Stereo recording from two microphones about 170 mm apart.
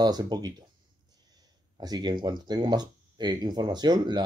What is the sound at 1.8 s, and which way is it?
Speech, 25° right (ahead or behind).